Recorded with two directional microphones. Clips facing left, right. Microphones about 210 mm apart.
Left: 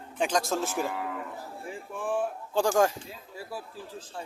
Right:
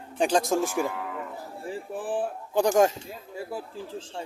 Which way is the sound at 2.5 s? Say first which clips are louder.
Right 3 dB; 20° right (ahead or behind).